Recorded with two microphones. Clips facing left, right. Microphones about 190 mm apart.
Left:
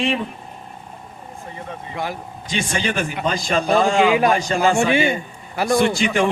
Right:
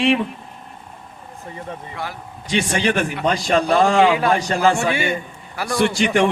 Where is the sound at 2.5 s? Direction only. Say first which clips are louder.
Right 4 dB; 70° right (ahead or behind).